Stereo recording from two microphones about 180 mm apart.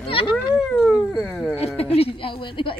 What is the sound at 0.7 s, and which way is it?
Speech, centre (ahead or behind).